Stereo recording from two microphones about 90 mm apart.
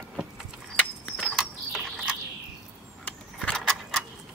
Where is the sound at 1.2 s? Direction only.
5° right (ahead or behind).